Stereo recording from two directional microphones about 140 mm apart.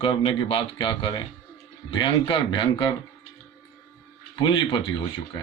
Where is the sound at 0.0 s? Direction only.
40° left (ahead or behind).